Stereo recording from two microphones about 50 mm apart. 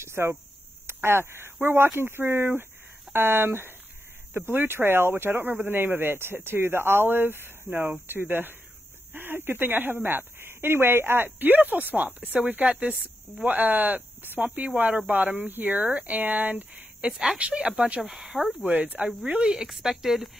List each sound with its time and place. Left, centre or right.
0.0 s a sound: right
0.8 s speech: right
12.6 s speech: right
13.4 s speech: right
17.0 s speech: right
18.6 s speech: right
19.4 s speech: centre